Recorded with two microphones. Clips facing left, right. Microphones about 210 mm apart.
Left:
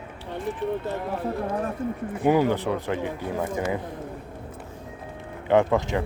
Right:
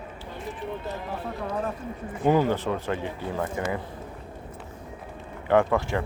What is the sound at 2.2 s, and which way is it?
Speech, 15° left (ahead or behind).